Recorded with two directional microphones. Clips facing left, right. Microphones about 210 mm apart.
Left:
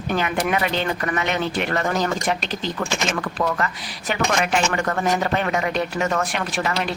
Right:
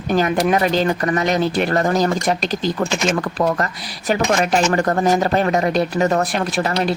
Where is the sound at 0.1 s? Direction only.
35° right (ahead or behind).